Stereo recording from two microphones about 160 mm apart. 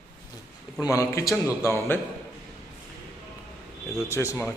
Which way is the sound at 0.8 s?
20° left (ahead or behind).